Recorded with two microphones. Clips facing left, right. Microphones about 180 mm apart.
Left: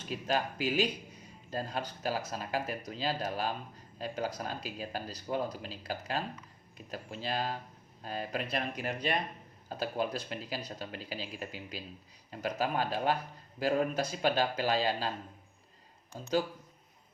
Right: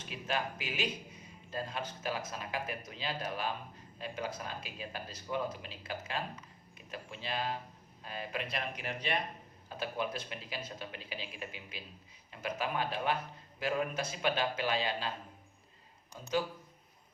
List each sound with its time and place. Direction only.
0.3 s speech: 40° left (ahead or behind)